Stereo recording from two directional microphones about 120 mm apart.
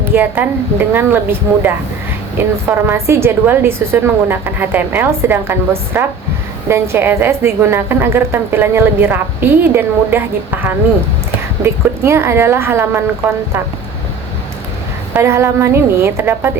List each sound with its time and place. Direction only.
0.0 s a woman's voice: 15° right (ahead or behind)
15.1 s a woman's voice: 20° right (ahead or behind)